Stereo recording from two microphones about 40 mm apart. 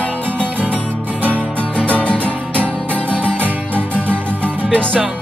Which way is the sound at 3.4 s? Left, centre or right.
Right.